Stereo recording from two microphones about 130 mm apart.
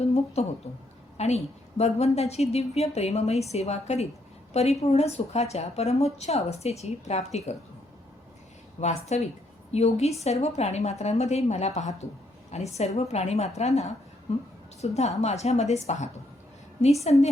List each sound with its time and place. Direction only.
0.0 s a woman's voice: 55° left (ahead or behind)
8.8 s a woman's voice: 60° left (ahead or behind)